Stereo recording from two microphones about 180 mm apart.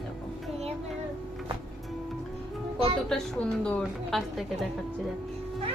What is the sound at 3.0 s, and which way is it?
A woman's voice, 5° left (ahead or behind).